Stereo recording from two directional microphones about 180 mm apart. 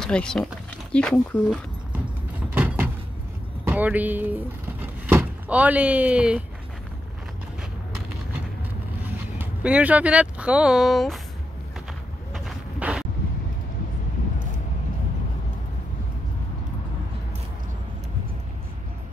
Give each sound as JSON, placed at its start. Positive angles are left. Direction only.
{"t": 0.0, "sound": "speech", "side_deg": 5}
{"t": 2.5, "sound": "door", "side_deg": -10}
{"t": 3.6, "sound": "speech", "side_deg": -10}
{"t": 9.4, "sound": "speech", "side_deg": -5}
{"t": 12.4, "sound": "a sound", "side_deg": -5}